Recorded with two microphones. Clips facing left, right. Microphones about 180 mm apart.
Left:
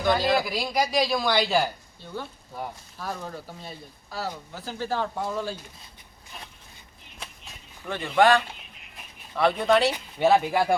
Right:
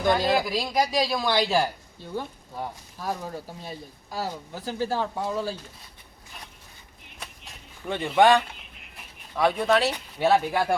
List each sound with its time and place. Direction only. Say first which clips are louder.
0.1 s speech: even; 20° right (ahead or behind)
0.4 s a woman's voice: right 1 dB; centre (ahead or behind)
3.0 s speech: right 3 dB; 15° right (ahead or behind)
7.9 s speech: right 1 dB; 20° right (ahead or behind)
9.3 s a woman's voice: left 1 dB; 10° right (ahead or behind)